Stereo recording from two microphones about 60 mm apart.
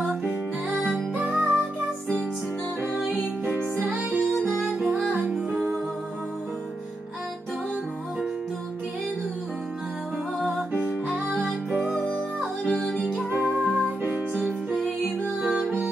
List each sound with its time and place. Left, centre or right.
0.3 s music: right
3.8 s music: right
4.4 s music: centre
12.6 s music: centre
13.6 s music: right